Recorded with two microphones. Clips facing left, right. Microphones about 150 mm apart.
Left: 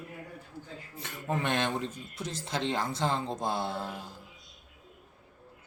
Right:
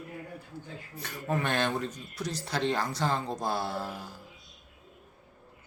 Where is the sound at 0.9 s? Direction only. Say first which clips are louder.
Right 2 dB; 20° left (ahead or behind).